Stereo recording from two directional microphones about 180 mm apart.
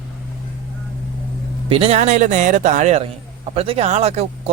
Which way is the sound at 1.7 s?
35° right (ahead or behind).